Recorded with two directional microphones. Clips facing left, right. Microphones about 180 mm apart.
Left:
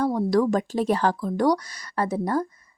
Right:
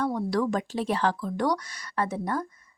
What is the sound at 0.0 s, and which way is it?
Speech, 35° left (ahead or behind).